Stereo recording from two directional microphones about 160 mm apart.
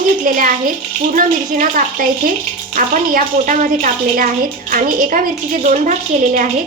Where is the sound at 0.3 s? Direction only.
55° right (ahead or behind).